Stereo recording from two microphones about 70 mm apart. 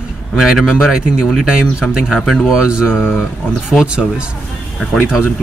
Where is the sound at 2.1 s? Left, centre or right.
Centre.